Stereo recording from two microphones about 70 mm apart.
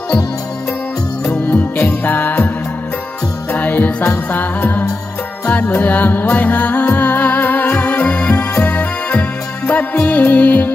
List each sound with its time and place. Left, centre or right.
1.2 s music: centre
3.5 s music: left